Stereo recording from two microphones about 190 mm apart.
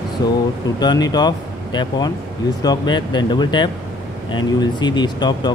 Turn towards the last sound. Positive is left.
turn(degrees=20)  # may be behind; listen again after turning